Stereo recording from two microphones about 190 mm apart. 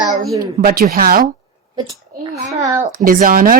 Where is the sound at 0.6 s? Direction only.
50° right (ahead or behind).